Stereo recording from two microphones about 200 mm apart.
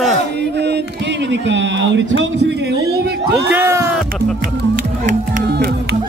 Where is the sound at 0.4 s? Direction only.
55° right (ahead or behind).